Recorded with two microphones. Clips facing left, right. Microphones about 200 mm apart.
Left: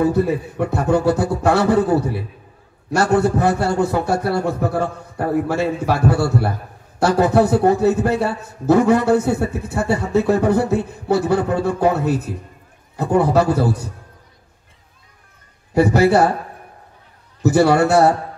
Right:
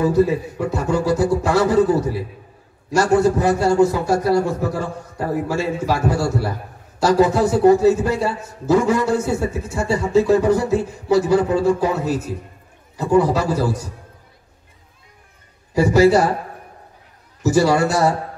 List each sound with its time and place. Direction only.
0.0 s a man's voice: 60° left (ahead or behind)
15.7 s a man's voice: 60° left (ahead or behind)
17.4 s a man's voice: 60° left (ahead or behind)